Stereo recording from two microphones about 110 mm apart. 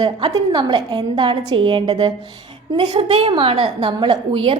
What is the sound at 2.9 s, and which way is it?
Speech, 70° right (ahead or behind).